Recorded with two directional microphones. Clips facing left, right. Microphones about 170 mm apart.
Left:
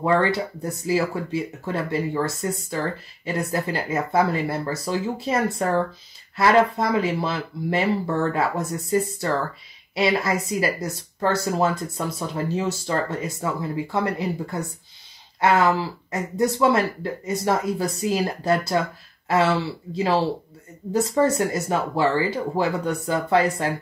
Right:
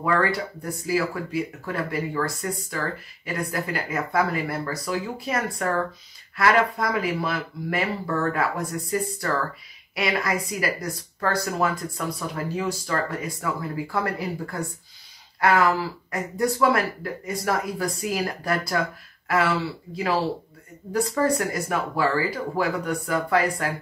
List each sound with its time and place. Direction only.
0.0 s speech: 25° left (ahead or behind)